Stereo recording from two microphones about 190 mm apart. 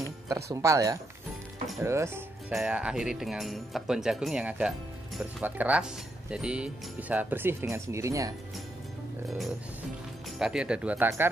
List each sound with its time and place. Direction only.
0.3 s speech: 15° right (ahead or behind)
10.4 s speech: 5° right (ahead or behind)